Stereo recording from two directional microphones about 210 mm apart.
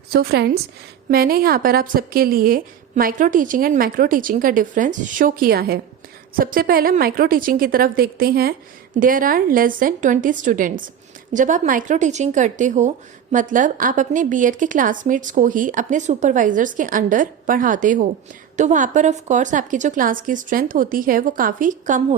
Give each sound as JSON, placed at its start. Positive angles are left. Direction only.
{"t": 0.1, "sound": "a woman's voice", "side_deg": -50}